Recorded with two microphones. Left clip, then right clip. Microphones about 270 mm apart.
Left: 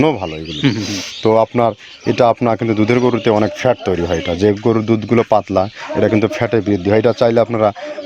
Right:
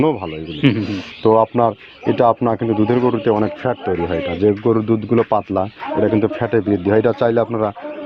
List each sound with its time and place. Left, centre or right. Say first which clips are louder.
0.8 s speech: left 1 dB; left